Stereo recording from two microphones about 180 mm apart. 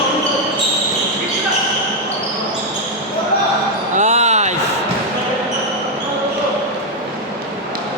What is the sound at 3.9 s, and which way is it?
Basketball bounce, 40° right (ahead or behind).